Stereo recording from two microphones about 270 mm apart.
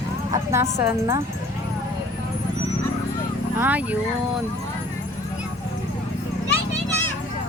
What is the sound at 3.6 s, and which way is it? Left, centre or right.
Speech, centre.